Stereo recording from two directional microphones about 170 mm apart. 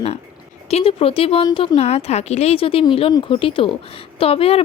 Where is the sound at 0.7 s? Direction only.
35° left (ahead or behind).